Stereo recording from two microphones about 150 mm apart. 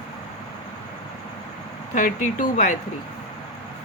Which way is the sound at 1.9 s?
60° left (ahead or behind).